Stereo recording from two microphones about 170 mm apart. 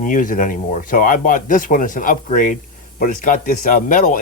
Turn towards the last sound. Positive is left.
turn(degrees=50)  # may be behind; listen again after turning